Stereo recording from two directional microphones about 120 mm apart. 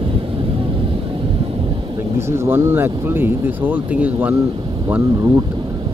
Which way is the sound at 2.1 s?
25° right (ahead or behind).